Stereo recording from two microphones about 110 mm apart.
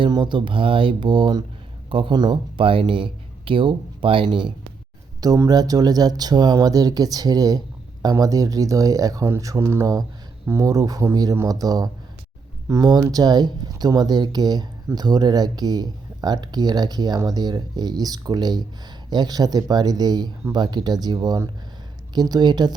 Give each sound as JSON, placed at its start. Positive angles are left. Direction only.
{"t": 0.0, "sound": "mantra", "side_deg": -45}
{"t": 1.9, "sound": "speech", "side_deg": -50}
{"t": 5.2, "sound": "speech", "side_deg": -35}